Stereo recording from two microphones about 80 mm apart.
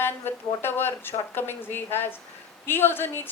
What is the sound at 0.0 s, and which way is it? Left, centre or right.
A woman's voice, left.